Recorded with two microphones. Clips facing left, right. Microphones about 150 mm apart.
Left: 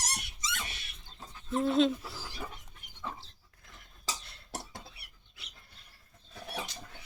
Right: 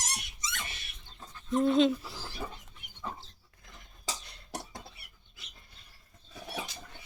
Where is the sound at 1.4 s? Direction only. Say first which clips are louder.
Right 2 dB; centre (ahead or behind).